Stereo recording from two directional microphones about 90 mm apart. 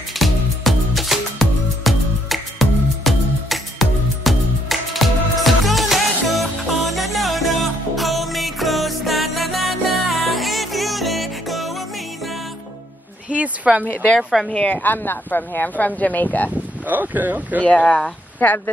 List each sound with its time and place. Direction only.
0.2 s music: centre (ahead or behind)
13.3 s a sound: 15° right (ahead or behind)
14.1 s speech: 5° left (ahead or behind)
14.6 s speech: 20° left (ahead or behind)
16.8 s speech: 20° right (ahead or behind)
17.6 s speech: 10° left (ahead or behind)
18.4 s speech: 20° left (ahead or behind)